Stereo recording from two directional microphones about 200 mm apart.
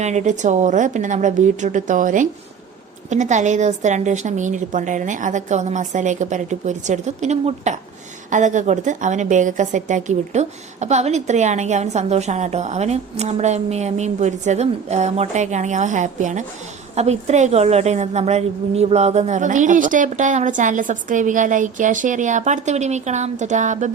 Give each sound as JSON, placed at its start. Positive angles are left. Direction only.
{"t": 0.0, "sound": "a woman's voice", "side_deg": -35}